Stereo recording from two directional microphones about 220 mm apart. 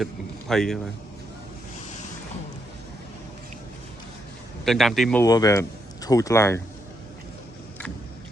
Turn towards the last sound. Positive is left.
turn(degrees=15)  # may be behind; listen again after turning